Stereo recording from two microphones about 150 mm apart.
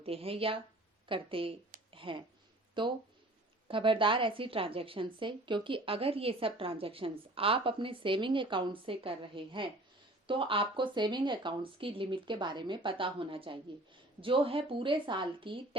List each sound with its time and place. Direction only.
0.0 s a woman's voice: 40° right (ahead or behind)
1.9 s a sound: 35° right (ahead or behind)
2.8 s a woman's voice: 35° right (ahead or behind)